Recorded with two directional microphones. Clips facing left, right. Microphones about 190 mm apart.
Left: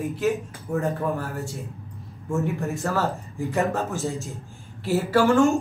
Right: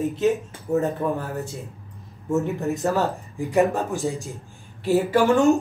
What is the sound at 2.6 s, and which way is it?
Speech, 20° right (ahead or behind).